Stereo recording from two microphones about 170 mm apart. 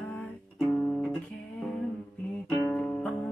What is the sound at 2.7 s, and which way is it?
Music, 5° left (ahead or behind).